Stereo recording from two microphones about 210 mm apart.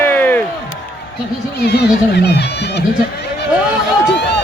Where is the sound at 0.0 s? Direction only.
10° left (ahead or behind).